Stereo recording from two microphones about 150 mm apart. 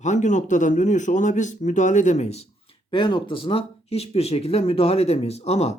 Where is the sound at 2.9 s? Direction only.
30° left (ahead or behind).